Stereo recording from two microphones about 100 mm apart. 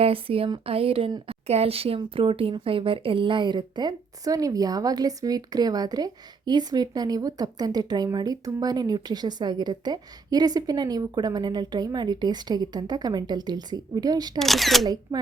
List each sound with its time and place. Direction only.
0.0 s speech: 70° right (ahead or behind)
1.3 s a woman's voice: 80° right
2.0 s a woman's voice: 65° right (ahead or behind); by 14.3 s 40° right (ahead or behind)
14.3 s speech: centre (ahead or behind)